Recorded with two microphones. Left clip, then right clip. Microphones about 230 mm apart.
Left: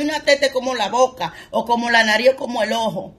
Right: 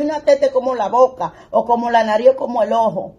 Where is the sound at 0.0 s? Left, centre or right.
Centre.